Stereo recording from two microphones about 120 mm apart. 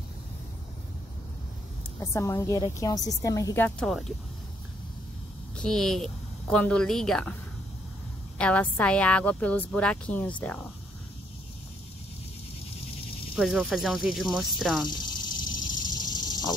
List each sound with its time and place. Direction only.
2.0 s a woman's voice: 25° left (ahead or behind)
3.8 s a woman's voice: centre (ahead or behind)
5.6 s a woman's voice: 5° left (ahead or behind)
8.4 s speech: 10° left (ahead or behind)
13.4 s a woman's voice: centre (ahead or behind)
14.9 s a sound: 40° left (ahead or behind)